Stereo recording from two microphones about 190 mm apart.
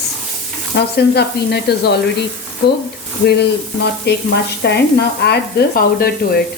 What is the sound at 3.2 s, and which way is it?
Speech, 60° left (ahead or behind).